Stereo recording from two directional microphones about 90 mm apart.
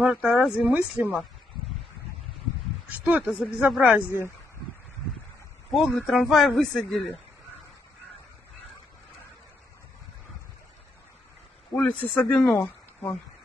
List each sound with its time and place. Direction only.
0.0 s speech: 10° right (ahead or behind)
2.9 s speech: 15° right (ahead or behind)
5.7 s speech: centre (ahead or behind)
11.7 s speech: 20° left (ahead or behind)
12.5 s a sound: 30° left (ahead or behind)